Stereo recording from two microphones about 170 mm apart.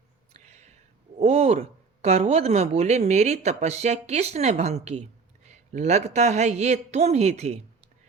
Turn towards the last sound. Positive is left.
turn(degrees=-40)  # may be behind; listen again after turning